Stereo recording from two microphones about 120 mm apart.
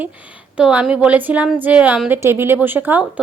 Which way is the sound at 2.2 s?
20° right (ahead or behind).